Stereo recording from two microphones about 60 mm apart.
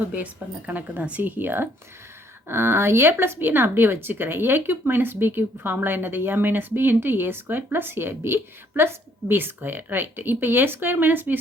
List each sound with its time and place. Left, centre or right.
0.1 s a woman's voice: right
1.4 s speech: right